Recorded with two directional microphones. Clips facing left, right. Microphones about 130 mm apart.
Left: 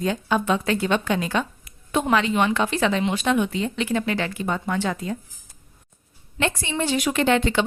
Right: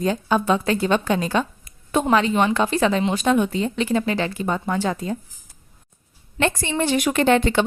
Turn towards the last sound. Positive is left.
turn(degrees=-45)  # may be behind; listen again after turning